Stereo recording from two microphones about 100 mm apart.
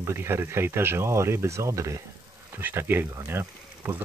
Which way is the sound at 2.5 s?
20° right (ahead or behind).